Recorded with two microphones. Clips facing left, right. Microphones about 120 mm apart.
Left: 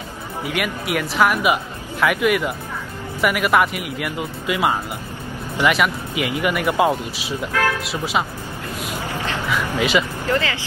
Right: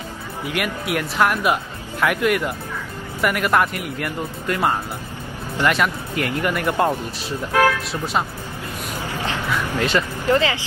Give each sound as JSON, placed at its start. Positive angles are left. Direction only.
{"t": 0.6, "sound": "speech", "side_deg": 0}
{"t": 9.7, "sound": "speech", "side_deg": 10}
{"t": 10.2, "sound": "speech", "side_deg": -20}